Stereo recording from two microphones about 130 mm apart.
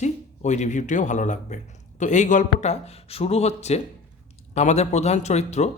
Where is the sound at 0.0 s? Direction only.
65° left (ahead or behind).